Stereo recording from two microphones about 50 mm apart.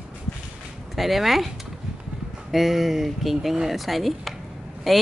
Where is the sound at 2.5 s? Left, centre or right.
Centre.